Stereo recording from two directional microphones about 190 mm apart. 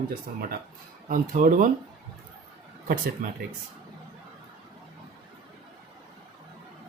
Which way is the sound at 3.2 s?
45° right (ahead or behind).